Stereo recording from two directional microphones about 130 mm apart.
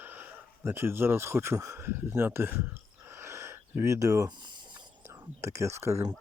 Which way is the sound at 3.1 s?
20° right (ahead or behind).